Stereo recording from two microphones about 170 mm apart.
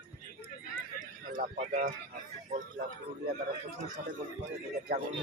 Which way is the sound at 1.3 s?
50° right (ahead or behind).